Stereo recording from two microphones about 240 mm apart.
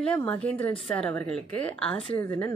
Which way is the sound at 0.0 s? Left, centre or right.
Centre.